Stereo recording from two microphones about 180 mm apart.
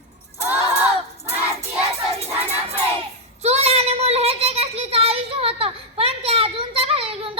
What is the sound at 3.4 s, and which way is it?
A child's voice, 35° right (ahead or behind).